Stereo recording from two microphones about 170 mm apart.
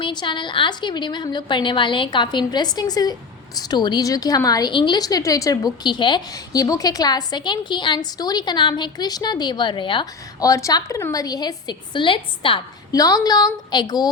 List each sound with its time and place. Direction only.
0.0 s a woman's voice: 25° left (ahead or behind)